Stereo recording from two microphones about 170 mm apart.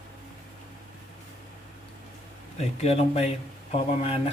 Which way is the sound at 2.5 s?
35° left (ahead or behind).